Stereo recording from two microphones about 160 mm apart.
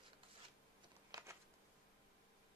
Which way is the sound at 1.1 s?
20° right (ahead or behind).